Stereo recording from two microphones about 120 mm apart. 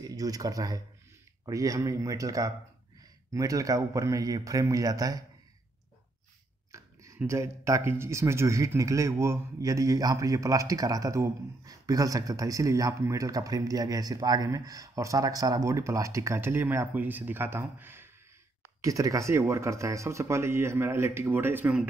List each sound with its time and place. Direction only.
0.0 s speech: 30° right (ahead or behind)
6.7 s a sound: 25° right (ahead or behind)
7.2 s speech: 25° right (ahead or behind)